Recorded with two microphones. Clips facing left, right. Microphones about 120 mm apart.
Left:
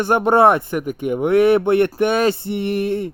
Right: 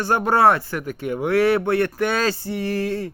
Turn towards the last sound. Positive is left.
turn(degrees=20)  # may be behind; listen again after turning